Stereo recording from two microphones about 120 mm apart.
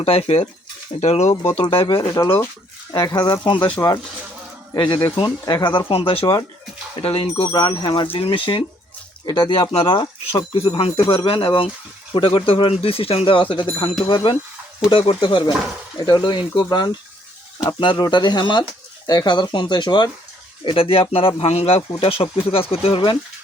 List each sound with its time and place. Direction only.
0.0 s speech: 55° left (ahead or behind)
0.9 s speech: 65° left (ahead or behind)
1.6 s speech: 50° left (ahead or behind)
2.0 s speech: 40° left (ahead or behind)
3.8 s speech: 30° left (ahead or behind)
5.9 s speech: 50° left (ahead or behind)
7.5 s speech: 35° left (ahead or behind)
20.7 s speech: 50° left (ahead or behind)